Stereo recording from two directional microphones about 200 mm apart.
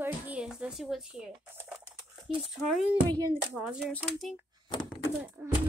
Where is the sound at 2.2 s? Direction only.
Centre (ahead or behind).